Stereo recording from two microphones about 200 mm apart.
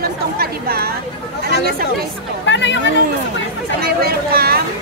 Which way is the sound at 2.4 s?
65° left (ahead or behind).